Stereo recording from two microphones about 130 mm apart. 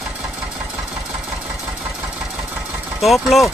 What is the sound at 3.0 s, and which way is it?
Speech, centre (ahead or behind).